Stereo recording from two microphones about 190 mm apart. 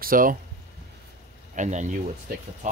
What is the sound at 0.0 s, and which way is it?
Speech, 45° right (ahead or behind).